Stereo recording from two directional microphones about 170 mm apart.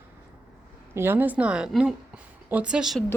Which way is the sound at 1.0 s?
10° right (ahead or behind).